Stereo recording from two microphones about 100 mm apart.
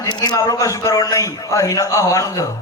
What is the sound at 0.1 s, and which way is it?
A man's voice, 40° left (ahead or behind).